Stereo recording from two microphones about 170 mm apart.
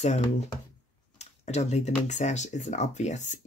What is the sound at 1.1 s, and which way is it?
Speech, 40° left (ahead or behind).